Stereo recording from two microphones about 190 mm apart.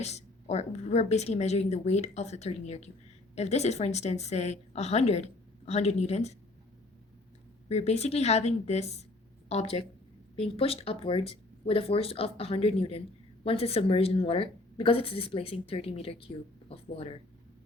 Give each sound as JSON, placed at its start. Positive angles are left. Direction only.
{"t": 0.0, "sound": "a woman's voice", "side_deg": 35}
{"t": 7.7, "sound": "a woman's voice", "side_deg": 35}